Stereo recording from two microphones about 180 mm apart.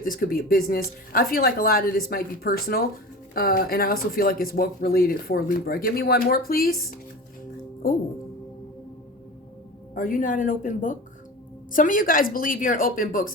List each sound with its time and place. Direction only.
0.0 s speech: 50° left (ahead or behind)
9.9 s speech: 50° left (ahead or behind)